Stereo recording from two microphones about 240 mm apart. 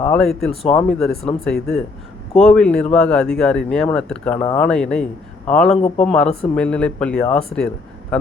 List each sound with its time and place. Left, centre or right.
0.0 s speech: centre
0.6 s speech: left
0.9 s speech: centre